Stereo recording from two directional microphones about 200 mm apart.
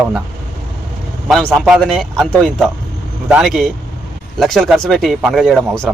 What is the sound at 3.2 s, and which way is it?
Speech, 5° right (ahead or behind).